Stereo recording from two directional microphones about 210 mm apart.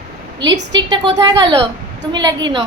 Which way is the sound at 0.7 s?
20° right (ahead or behind).